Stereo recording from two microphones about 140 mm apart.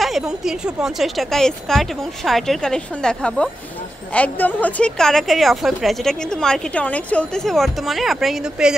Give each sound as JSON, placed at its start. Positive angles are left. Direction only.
{"t": 0.0, "sound": "a woman's voice", "side_deg": 0}